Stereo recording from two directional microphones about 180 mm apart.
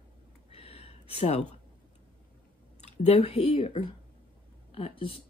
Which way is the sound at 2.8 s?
35° left (ahead or behind).